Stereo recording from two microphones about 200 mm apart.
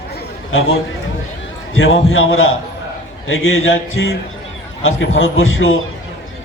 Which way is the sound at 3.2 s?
90° left.